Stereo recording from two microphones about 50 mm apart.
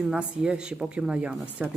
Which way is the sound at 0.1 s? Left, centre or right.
Centre.